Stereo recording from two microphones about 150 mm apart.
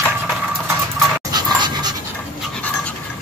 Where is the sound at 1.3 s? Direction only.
30° right (ahead or behind).